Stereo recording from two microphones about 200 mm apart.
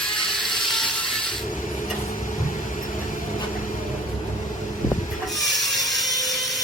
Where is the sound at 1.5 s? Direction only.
40° left (ahead or behind).